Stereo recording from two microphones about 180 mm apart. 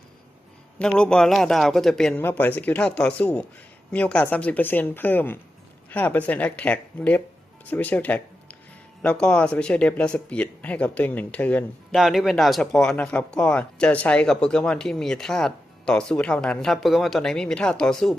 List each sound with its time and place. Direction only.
0.8 s a woman's voice: 5° left (ahead or behind)